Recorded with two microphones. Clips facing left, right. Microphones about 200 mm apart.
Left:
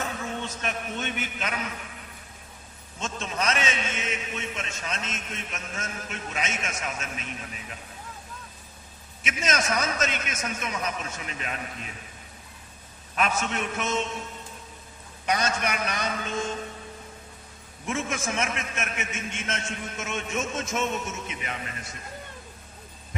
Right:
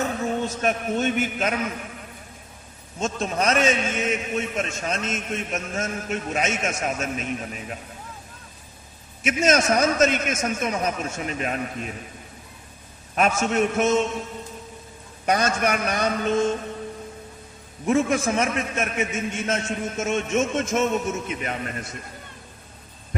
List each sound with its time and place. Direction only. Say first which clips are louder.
0.4 s a man's voice: right 8 dB; 45° right (ahead or behind)
3.0 s a man's voice: right 6 dB; 40° right (ahead or behind)
9.2 s a man's voice: right 8 dB; 45° right (ahead or behind)
13.1 s a man's voice: right 7 dB; 45° right (ahead or behind)
15.3 s a man's voice: right 5 dB; 50° right (ahead or behind)
17.8 s a man's voice: right 9 dB; 40° right (ahead or behind)